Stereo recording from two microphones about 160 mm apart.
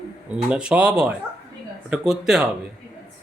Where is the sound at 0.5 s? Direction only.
5° right (ahead or behind).